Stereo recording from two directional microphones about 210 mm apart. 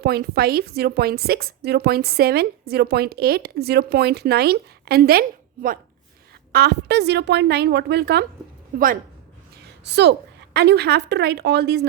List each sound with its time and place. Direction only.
0.0 s a woman's voice: 45° right (ahead or behind)
6.5 s a woman's voice: 50° right (ahead or behind)
9.8 s a woman's voice: 55° right (ahead or behind)